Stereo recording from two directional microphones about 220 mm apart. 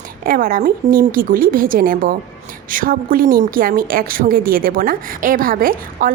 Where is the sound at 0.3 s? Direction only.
40° right (ahead or behind).